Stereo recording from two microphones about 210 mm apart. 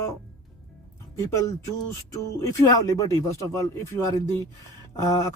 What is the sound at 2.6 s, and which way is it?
Speech, 20° left (ahead or behind).